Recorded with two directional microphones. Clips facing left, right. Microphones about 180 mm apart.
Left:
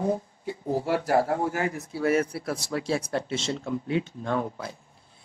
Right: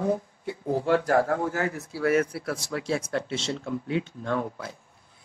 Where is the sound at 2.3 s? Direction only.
35° left (ahead or behind).